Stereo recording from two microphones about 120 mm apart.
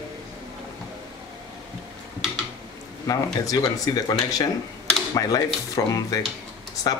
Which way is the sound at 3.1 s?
30° left (ahead or behind).